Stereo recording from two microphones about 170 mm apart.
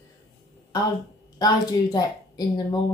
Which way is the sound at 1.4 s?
20° left (ahead or behind).